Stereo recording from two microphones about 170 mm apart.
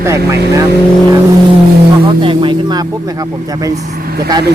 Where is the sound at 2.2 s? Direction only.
30° right (ahead or behind).